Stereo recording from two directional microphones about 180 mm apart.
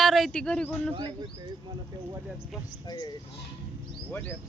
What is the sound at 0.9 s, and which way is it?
Speech, 25° right (ahead or behind).